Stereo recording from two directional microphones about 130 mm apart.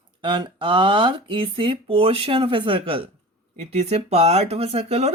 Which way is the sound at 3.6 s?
60° right (ahead or behind).